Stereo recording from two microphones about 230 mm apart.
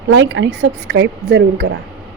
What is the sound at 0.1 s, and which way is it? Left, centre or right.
A woman's voice, right.